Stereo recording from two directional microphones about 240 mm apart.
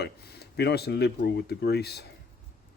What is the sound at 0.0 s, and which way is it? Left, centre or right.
Speech, left.